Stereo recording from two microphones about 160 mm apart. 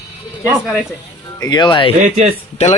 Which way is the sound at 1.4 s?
25° left (ahead or behind).